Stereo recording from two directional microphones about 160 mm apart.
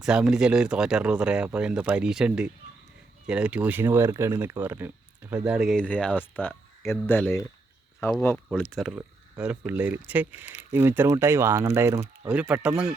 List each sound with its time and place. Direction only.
0.0 s speech: 5° right (ahead or behind); by 8.2 s 20° left (ahead or behind)
8.5 s speech: centre (ahead or behind)